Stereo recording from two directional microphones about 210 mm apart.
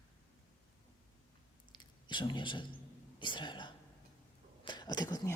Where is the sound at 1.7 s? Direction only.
20° left (ahead or behind).